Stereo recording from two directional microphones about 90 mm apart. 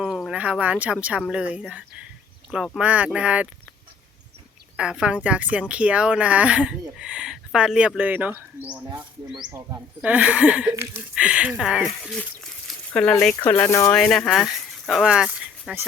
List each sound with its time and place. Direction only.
0.0 s a sound: centre (ahead or behind)
0.3 s a woman's voice: 15° right (ahead or behind)
2.7 s a woman's voice: 15° right (ahead or behind)
4.8 s a woman's voice: 10° right (ahead or behind)
10.0 s a woman's voice: 15° right (ahead or behind)
12.9 s speech: 15° left (ahead or behind)
13.4 s speech: 25° left (ahead or behind)
13.9 s speech: 5° left (ahead or behind)